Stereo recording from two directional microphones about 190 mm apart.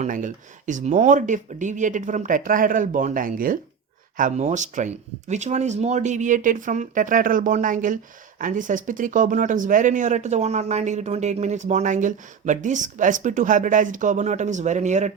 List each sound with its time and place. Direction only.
0.0 s speech: 40° right (ahead or behind)